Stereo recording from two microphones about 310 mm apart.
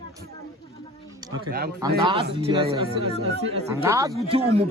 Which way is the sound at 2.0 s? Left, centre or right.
Centre.